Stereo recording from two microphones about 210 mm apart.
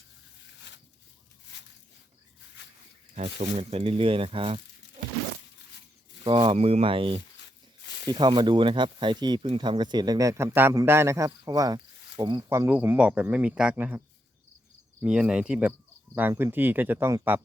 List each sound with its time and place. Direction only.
0.7 s a sound: 55° left (ahead or behind)
3.2 s speech: 35° right (ahead or behind)
6.2 s speech: 25° right (ahead or behind); by 14.0 s 5° right (ahead or behind)
15.0 s speech: 5° right (ahead or behind)